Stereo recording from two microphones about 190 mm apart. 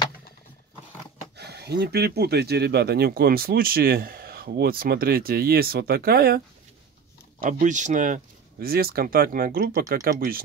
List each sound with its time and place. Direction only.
1.3 s speech: 60° right (ahead or behind)
7.4 s speech: 40° right (ahead or behind)